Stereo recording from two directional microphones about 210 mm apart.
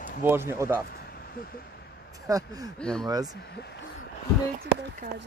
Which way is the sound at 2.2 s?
15° right (ahead or behind).